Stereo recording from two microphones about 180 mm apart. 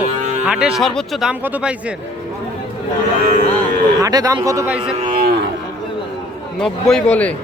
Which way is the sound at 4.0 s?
20° right (ahead or behind).